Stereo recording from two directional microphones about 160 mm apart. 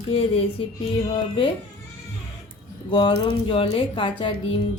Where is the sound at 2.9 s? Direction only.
30° left (ahead or behind).